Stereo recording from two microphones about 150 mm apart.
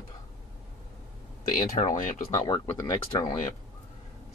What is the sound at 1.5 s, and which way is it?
Speech, 55° left (ahead or behind).